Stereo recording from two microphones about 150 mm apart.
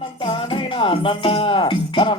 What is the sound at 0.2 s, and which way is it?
Speech, 35° left (ahead or behind).